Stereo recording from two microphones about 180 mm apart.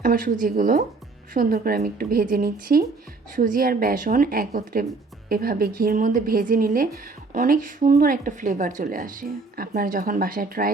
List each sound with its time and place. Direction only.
0.0 s a woman's voice: 50° right (ahead or behind)